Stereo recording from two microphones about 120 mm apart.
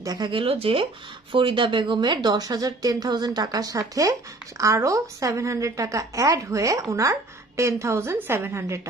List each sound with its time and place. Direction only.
0.0 s speech: 30° right (ahead or behind)
0.3 s a woman's voice: 50° right (ahead or behind); by 8.8 s 20° right (ahead or behind)